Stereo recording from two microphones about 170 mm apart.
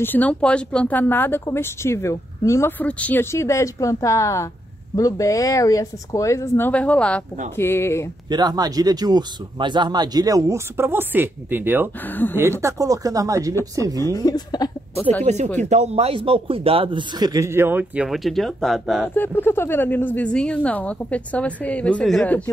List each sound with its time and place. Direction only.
0.0 s a woman's voice: 10° left (ahead or behind)
8.3 s speech: 25° right (ahead or behind)
12.1 s a woman's voice: 10° left (ahead or behind)
12.4 s speech: 15° right (ahead or behind)
13.9 s speech: 20° left (ahead or behind)
15.3 s a man's voice: 40° right (ahead or behind); by 19.0 s centre (ahead or behind)
19.0 s a woman's voice: 10° left (ahead or behind)